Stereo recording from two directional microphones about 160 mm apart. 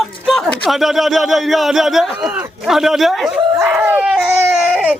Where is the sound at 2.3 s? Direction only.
10° right (ahead or behind).